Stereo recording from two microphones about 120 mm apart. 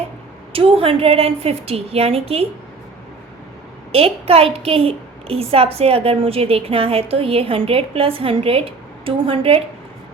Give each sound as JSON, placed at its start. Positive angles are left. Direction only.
{"t": 0.5, "sound": "a woman's voice", "side_deg": -50}
{"t": 3.9, "sound": "a woman's voice", "side_deg": -55}